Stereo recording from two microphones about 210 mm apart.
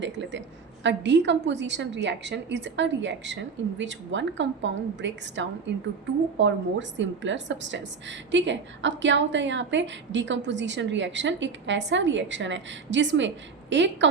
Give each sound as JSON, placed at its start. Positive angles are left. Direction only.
{"t": 0.0, "sound": "a woman's voice", "side_deg": -60}